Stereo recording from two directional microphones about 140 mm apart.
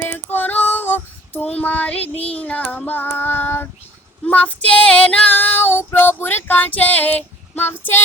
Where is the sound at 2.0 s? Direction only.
45° left (ahead or behind).